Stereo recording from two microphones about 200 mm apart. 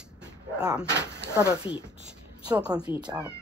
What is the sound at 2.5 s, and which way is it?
Speech, 5° right (ahead or behind).